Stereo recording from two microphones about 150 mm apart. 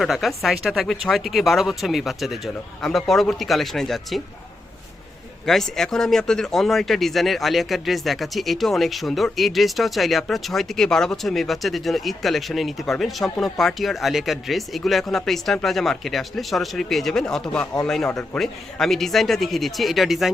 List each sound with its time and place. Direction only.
0.0 s speech: centre (ahead or behind)
5.5 s speech: centre (ahead or behind)